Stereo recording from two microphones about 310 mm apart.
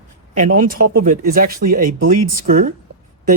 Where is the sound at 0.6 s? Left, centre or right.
Right.